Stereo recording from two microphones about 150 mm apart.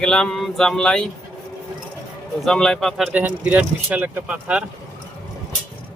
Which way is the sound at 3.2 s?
10° right (ahead or behind).